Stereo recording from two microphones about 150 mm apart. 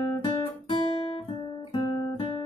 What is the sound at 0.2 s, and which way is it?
Guitar, 40° left (ahead or behind).